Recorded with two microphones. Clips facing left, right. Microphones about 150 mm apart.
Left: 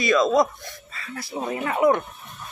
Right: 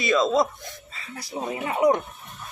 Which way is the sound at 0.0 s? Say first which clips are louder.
Left 2 dB; 25° right (ahead or behind).